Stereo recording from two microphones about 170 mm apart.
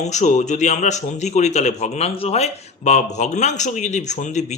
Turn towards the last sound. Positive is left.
turn(degrees=45)  # may be behind; listen again after turning